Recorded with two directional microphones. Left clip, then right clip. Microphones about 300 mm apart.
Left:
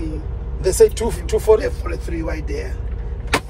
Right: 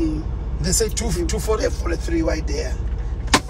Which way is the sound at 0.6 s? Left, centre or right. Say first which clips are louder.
Left 9 dB; left.